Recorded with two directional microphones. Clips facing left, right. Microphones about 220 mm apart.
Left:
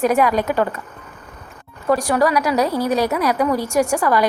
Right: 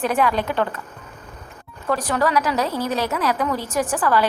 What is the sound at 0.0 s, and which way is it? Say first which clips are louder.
Speech: left 4 dB; 10° left (ahead or behind).